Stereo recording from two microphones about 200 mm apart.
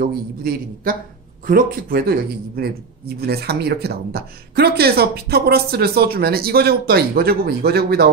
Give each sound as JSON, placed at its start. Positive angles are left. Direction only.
{"t": 0.0, "sound": "speech", "side_deg": -50}